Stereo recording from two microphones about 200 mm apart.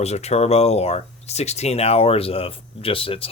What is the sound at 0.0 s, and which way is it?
Speech, 30° left (ahead or behind).